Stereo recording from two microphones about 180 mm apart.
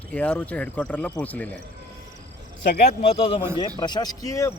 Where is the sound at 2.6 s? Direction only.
45° left (ahead or behind).